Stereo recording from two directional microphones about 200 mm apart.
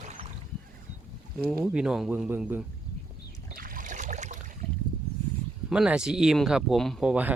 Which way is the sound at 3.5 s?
45° right (ahead or behind).